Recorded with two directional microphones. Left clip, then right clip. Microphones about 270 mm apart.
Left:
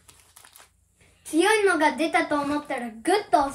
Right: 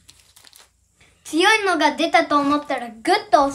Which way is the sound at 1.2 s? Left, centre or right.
Right.